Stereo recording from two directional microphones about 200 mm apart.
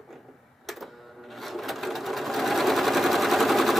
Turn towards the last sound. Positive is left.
turn(degrees=0)  # may be behind; listen again after turning